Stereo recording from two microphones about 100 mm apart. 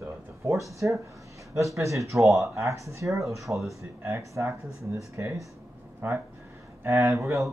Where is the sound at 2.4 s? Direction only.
30° right (ahead or behind).